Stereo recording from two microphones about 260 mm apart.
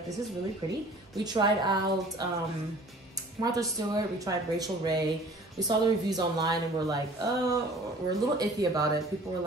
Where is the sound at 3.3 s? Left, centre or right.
Centre.